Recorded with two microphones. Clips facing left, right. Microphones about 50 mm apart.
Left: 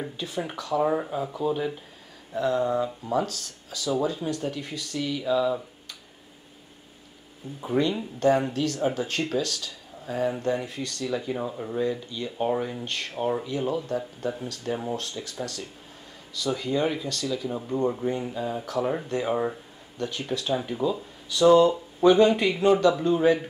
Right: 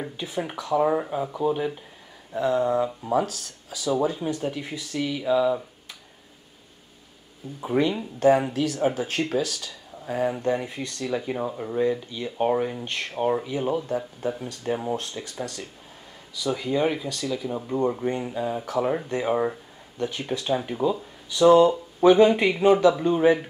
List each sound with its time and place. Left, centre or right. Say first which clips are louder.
0.0 s speech: right 1 dB; centre
7.6 s speech: right 2 dB; centre